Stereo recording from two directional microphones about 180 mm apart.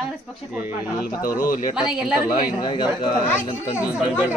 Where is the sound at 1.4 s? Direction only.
45° left (ahead or behind).